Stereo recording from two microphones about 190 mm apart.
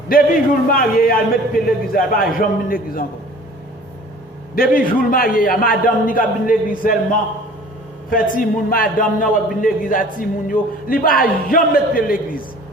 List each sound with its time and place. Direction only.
0.1 s a man's voice: 50° left (ahead or behind)
4.5 s a man's voice: 50° left (ahead or behind)
8.4 s a man's voice: 45° left (ahead or behind)